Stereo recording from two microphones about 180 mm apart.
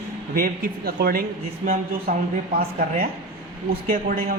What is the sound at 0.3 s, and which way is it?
Speech, 55° right (ahead or behind).